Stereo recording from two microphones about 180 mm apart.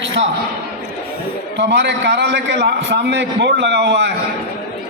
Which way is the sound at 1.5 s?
75° right (ahead or behind).